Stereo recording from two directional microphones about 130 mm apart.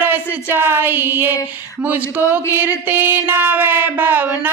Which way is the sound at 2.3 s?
15° right (ahead or behind).